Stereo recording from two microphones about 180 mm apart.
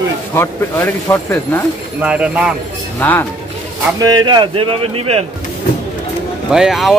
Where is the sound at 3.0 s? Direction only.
10° left (ahead or behind).